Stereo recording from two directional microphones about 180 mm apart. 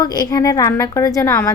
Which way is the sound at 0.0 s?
20° left (ahead or behind).